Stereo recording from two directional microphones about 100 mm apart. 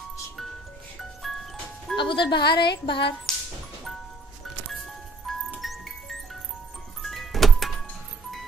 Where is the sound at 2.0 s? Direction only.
55° left (ahead or behind).